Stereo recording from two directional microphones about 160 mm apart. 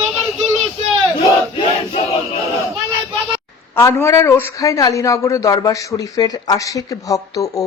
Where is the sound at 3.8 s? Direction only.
20° left (ahead or behind).